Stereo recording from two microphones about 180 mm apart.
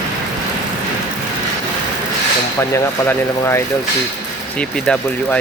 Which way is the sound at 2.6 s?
15° left (ahead or behind).